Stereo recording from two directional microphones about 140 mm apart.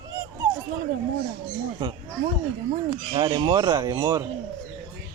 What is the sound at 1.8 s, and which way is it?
Speech, 35° right (ahead or behind).